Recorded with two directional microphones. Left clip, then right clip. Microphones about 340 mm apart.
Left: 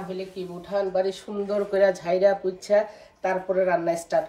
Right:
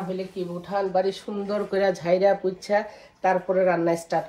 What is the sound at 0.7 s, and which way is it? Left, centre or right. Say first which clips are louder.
Speech: even; centre.